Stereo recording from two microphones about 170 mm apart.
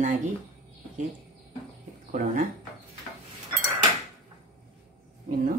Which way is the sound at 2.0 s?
50° right (ahead or behind).